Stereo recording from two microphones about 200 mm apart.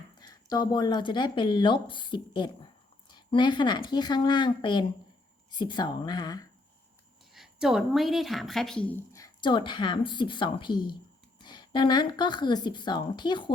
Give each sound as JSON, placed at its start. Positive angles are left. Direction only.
{"t": 0.2, "sound": "speech", "side_deg": 20}
{"t": 7.3, "sound": "speech", "side_deg": -5}
{"t": 9.1, "sound": "speech", "side_deg": 20}